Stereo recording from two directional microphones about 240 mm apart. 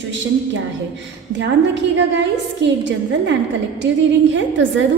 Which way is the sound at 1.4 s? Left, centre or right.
Right.